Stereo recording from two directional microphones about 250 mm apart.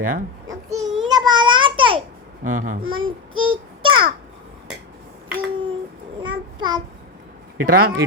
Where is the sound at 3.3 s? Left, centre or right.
Right.